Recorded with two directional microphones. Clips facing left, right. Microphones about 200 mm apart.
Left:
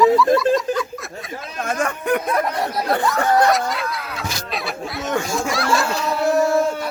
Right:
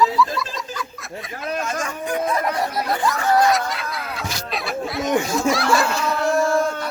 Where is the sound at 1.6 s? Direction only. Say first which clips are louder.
Left 4 dB; 60° left (ahead or behind).